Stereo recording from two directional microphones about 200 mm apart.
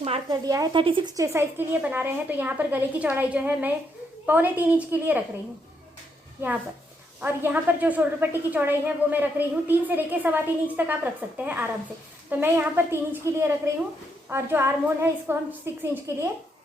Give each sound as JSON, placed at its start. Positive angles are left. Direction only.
{"t": 0.0, "sound": "speech", "side_deg": -30}
{"t": 0.4, "sound": "a woman's voice", "side_deg": -15}
{"t": 6.4, "sound": "a woman's voice", "side_deg": -10}